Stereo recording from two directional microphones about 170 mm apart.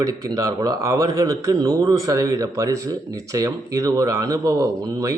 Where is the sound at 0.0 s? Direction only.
20° right (ahead or behind).